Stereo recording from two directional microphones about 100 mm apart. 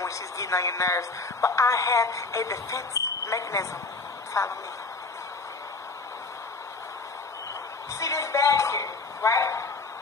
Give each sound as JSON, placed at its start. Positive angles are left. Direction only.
{"t": 0.0, "sound": "a woman's voice", "side_deg": 30}
{"t": 8.0, "sound": "speech", "side_deg": 30}